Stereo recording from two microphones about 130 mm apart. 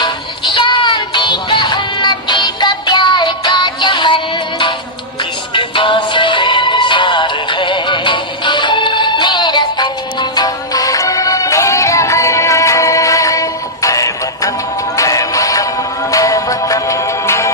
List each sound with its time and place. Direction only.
0.0 s music: 35° left (ahead or behind)
5.5 s music: 40° left (ahead or behind); by 17.5 s 20° left (ahead or behind)